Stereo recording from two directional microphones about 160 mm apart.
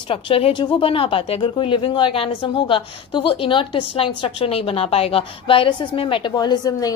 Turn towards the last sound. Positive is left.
turn(degrees=20)  # may be behind; listen again after turning